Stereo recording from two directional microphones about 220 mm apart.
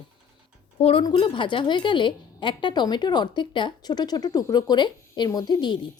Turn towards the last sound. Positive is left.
turn(degrees=20)  # may be behind; listen again after turning